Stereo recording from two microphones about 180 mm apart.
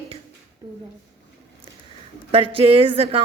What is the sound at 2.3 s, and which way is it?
Speech, 30° right (ahead or behind).